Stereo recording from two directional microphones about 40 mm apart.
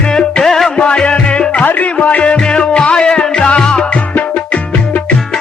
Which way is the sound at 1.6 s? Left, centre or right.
Left.